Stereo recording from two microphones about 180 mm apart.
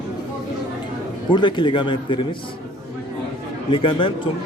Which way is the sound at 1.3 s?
25° left (ahead or behind).